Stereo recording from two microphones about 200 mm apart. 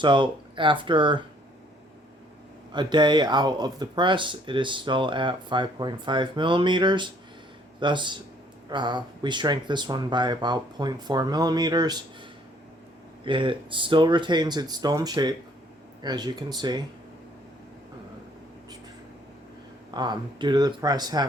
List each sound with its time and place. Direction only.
0.0 s speech: 25° right (ahead or behind)
2.7 s speech: 20° right (ahead or behind)
13.2 s speech: 25° right (ahead or behind)
19.9 s speech: 20° right (ahead or behind)